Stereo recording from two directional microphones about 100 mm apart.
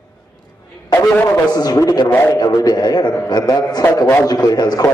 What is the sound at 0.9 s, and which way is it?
Speech, 25° left (ahead or behind).